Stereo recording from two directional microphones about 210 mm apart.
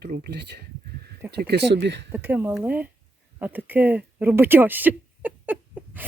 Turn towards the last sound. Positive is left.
turn(degrees=-10)  # may be behind; listen again after turning